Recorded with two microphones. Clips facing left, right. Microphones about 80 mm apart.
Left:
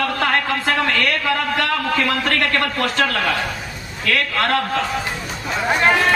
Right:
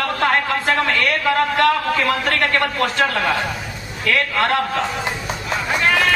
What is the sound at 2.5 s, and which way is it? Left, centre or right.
A man's voice, right.